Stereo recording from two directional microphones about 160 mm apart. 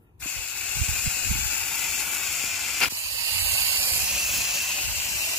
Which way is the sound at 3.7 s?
10° right (ahead or behind).